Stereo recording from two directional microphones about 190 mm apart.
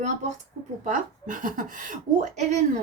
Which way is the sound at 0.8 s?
45° right (ahead or behind).